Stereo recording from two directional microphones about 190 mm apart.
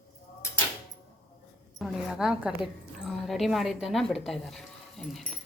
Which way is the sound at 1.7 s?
Centre (ahead or behind).